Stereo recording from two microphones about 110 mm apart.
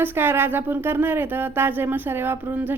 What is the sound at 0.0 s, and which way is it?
Speech, 20° right (ahead or behind).